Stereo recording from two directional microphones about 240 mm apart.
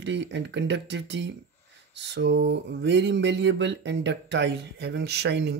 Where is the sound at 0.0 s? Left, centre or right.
Right.